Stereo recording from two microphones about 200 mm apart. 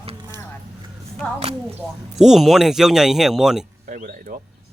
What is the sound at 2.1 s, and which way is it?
Speech, centre (ahead or behind).